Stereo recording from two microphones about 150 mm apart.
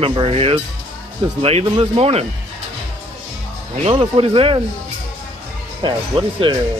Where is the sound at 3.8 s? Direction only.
35° right (ahead or behind).